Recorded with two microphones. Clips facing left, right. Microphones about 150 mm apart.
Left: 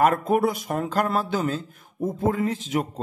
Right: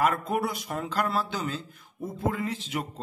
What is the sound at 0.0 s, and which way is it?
A man's voice, 50° left (ahead or behind).